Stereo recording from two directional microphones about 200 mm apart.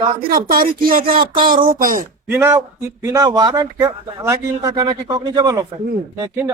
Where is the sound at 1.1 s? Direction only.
25° right (ahead or behind).